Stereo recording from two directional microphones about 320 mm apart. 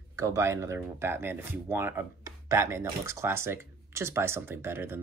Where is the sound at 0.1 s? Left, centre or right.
Centre.